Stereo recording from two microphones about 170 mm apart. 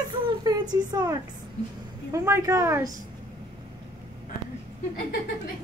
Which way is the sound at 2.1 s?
15° right (ahead or behind).